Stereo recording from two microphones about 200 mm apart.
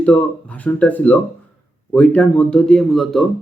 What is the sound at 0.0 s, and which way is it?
A man's voice, 5° left (ahead or behind).